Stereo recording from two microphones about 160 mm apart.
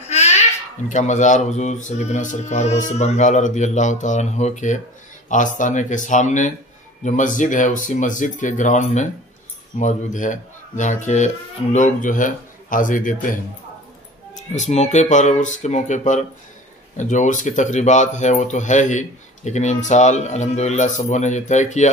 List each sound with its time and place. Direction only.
0.1 s babbling: 45° left (ahead or behind)
0.8 s speech: 50° left (ahead or behind)